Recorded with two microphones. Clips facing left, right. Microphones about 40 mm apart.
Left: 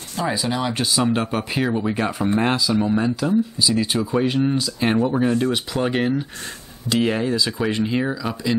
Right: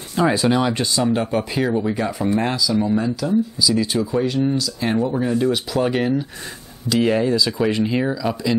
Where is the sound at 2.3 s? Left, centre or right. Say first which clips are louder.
Left 1 dB; left.